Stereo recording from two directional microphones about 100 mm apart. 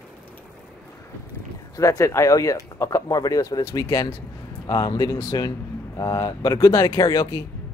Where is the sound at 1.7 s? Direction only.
35° left (ahead or behind).